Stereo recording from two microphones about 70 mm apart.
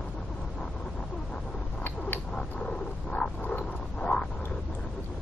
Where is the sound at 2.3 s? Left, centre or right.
Centre.